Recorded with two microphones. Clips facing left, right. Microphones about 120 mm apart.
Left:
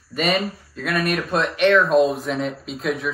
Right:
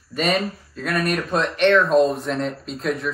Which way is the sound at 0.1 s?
5° left (ahead or behind).